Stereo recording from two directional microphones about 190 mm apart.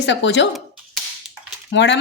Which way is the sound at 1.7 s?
70° left (ahead or behind).